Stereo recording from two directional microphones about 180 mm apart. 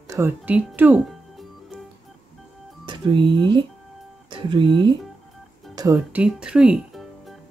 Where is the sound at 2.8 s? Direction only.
25° right (ahead or behind).